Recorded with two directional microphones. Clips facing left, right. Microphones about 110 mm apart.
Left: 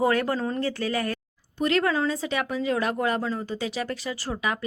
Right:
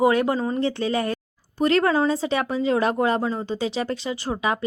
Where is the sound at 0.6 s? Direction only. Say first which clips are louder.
Right 4 dB; 25° right (ahead or behind).